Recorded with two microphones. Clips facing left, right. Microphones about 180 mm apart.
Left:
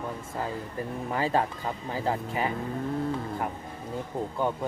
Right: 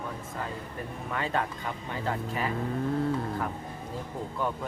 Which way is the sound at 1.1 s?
30° left (ahead or behind).